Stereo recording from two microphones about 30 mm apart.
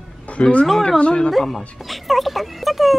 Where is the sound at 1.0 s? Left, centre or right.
Left.